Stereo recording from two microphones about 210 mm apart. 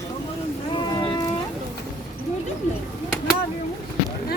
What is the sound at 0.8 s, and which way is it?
Boat, 20° left (ahead or behind).